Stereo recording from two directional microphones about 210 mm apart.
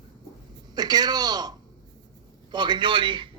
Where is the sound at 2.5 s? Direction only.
20° right (ahead or behind).